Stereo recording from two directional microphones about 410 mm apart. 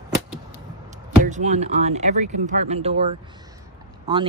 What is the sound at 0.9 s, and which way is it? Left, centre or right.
Speech, centre.